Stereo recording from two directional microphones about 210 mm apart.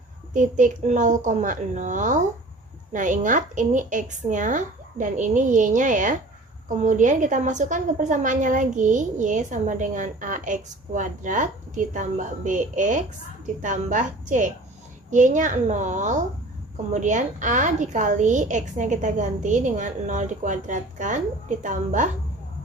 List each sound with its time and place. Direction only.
0.3 s a woman's voice: 35° right (ahead or behind)